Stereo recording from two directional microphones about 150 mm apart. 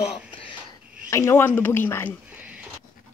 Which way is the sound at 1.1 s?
20° left (ahead or behind).